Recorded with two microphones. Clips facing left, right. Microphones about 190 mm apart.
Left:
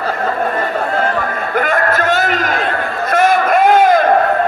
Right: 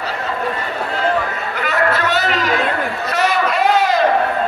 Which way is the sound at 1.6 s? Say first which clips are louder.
Left 2 dB; 50° left (ahead or behind).